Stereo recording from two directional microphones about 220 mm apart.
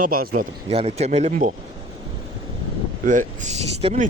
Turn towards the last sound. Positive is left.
turn(degrees=-30)  # may be behind; listen again after turning